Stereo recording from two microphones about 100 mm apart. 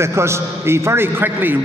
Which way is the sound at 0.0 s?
25° right (ahead or behind).